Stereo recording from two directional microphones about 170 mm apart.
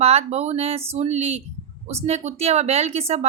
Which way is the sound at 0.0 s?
40° right (ahead or behind).